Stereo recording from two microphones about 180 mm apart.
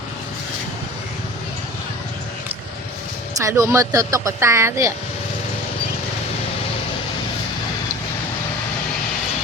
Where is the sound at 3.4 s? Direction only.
15° right (ahead or behind).